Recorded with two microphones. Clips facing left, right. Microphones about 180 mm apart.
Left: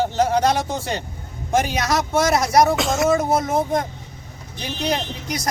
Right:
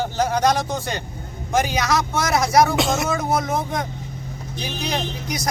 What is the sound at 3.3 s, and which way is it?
Speech, 25° left (ahead or behind).